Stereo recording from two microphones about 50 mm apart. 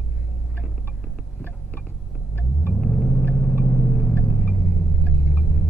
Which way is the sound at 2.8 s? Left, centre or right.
Centre.